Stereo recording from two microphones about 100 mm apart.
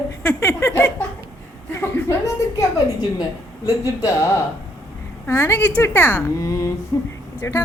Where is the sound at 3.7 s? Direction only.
30° left (ahead or behind).